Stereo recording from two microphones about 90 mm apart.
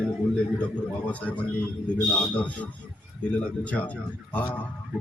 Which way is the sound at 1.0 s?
15° left (ahead or behind).